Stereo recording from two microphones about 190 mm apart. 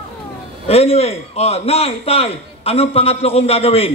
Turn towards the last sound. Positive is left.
turn(degrees=30)  # may be behind; listen again after turning